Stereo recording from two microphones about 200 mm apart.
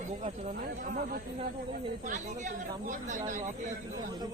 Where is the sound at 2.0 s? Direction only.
35° right (ahead or behind).